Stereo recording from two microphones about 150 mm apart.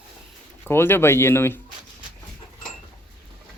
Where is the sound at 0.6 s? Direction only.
15° left (ahead or behind).